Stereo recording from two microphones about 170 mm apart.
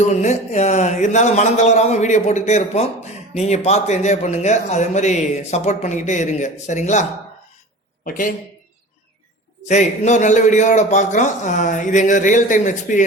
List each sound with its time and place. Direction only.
0.1 s speech: 40° left (ahead or behind)
8.0 s speech: 50° left (ahead or behind)
9.6 s speech: 45° left (ahead or behind)